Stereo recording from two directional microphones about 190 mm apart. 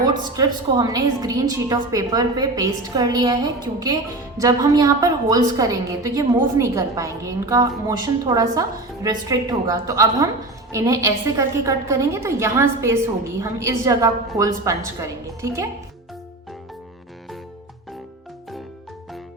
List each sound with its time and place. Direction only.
0.0 s a woman's voice: 20° right (ahead or behind)
4.4 s a woman's voice: 20° right (ahead or behind)